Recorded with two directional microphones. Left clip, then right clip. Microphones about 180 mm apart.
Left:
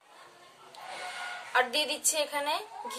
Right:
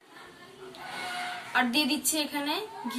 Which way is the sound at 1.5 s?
45° left (ahead or behind).